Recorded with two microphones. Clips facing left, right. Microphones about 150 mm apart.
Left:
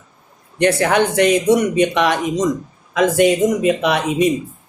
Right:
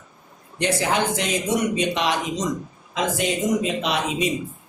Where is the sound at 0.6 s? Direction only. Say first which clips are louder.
Left 7 dB; 60° left (ahead or behind).